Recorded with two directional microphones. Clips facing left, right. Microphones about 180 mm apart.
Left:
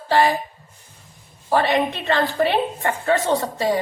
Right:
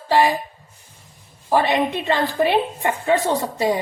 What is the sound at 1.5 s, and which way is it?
A woman's voice, 15° right (ahead or behind).